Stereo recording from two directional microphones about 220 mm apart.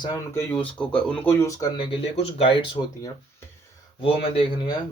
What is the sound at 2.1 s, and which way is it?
Speech, 25° left (ahead or behind).